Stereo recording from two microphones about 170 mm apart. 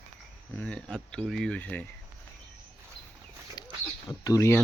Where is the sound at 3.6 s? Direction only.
20° left (ahead or behind).